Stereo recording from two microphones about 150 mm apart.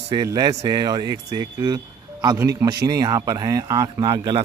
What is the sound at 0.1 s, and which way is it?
Speech, 25° right (ahead or behind).